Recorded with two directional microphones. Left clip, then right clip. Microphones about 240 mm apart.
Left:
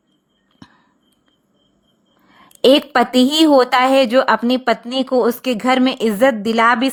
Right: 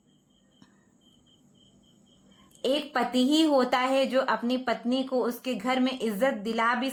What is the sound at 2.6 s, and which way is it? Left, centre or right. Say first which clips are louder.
A woman's voice: left 15 dB; left.